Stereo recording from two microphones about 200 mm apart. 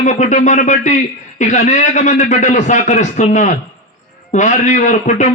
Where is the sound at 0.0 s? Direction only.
35° left (ahead or behind).